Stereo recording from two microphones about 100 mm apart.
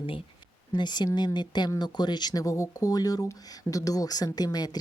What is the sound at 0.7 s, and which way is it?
A woman's voice, 50° left (ahead or behind).